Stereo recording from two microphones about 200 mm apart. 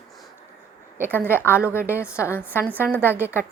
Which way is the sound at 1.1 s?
10° left (ahead or behind).